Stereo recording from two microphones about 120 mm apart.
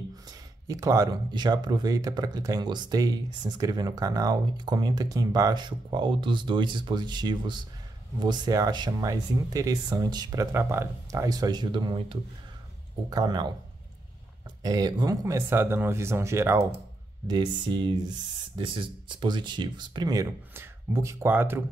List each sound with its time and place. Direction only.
0.3 s speech: 30° right (ahead or behind)
14.6 s speech: 35° right (ahead or behind)
17.3 s speech: 35° right (ahead or behind); by 21.6 s 15° right (ahead or behind)